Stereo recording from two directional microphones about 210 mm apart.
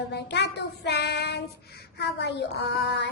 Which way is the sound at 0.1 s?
55° left (ahead or behind).